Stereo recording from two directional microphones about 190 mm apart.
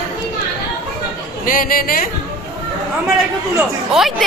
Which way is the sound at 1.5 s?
50° left (ahead or behind).